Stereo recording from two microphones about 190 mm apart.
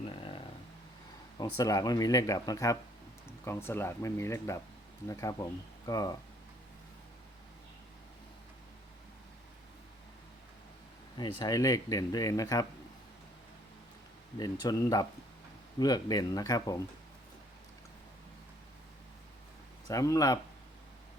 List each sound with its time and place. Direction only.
0.1 s a sound: 25° left (ahead or behind)
1.4 s speech: 20° left (ahead or behind)
11.2 s speech: 20° left (ahead or behind)
14.3 s speech: 20° left (ahead or behind)
19.9 s speech: 15° left (ahead or behind)